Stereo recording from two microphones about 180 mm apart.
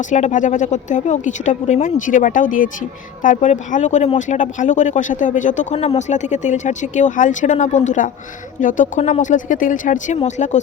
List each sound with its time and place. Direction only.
0.1 s speech: 45° left (ahead or behind)